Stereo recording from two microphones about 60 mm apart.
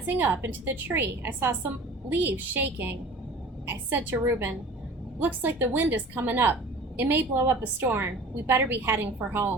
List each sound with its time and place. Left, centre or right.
0.2 s a woman's voice: right